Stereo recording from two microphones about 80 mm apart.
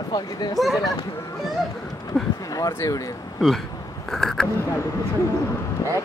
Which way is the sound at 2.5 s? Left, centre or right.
Left.